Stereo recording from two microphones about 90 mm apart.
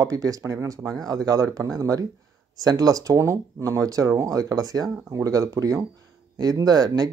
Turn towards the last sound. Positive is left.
turn(degrees=-45)  # may be behind; listen again after turning